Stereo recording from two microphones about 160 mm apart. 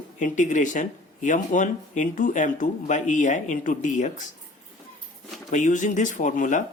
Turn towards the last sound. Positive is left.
turn(degrees=55)  # may be behind; listen again after turning